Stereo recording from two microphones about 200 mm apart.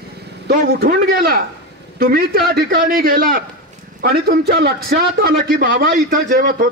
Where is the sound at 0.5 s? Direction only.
50° right (ahead or behind).